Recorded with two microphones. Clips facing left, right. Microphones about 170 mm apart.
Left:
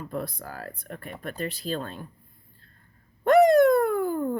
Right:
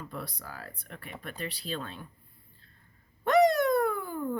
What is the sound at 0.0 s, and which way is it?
Speech, 50° left (ahead or behind).